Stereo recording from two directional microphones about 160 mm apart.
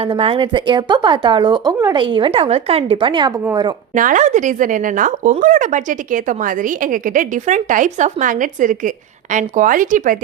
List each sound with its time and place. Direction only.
0.1 s a woman's voice: 35° right (ahead or behind)
3.9 s a woman's voice: 55° right (ahead or behind)